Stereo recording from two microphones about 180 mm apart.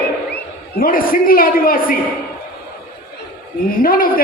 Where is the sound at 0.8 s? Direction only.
50° left (ahead or behind).